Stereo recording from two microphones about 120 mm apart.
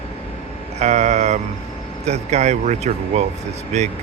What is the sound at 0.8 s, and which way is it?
A man's voice, 75° right (ahead or behind).